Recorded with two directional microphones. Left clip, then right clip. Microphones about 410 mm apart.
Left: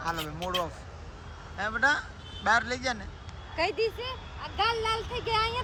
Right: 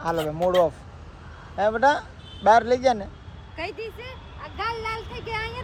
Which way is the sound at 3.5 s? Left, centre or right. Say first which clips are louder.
Left 5 dB; centre.